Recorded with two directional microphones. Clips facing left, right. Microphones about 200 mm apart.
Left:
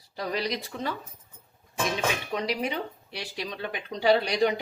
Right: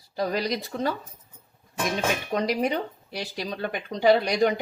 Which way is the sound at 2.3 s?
45° right (ahead or behind).